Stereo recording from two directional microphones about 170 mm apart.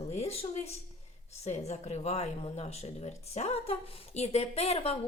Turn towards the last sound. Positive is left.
turn(degrees=40)  # may be behind; listen again after turning